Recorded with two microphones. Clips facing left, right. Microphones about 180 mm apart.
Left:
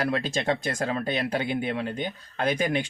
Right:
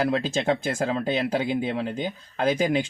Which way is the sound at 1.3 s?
25° right (ahead or behind).